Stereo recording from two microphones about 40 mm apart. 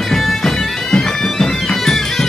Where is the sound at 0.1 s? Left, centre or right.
Centre.